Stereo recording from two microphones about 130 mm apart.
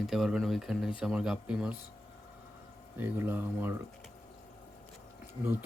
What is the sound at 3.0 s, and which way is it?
Speech, 15° right (ahead or behind).